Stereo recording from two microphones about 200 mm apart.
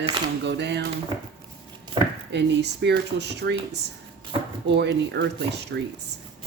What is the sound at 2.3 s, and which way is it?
Speech, 60° right (ahead or behind).